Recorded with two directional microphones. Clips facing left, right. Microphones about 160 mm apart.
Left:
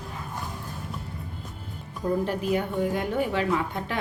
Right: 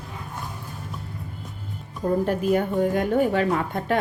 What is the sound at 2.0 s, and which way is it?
Speech, 45° right (ahead or behind).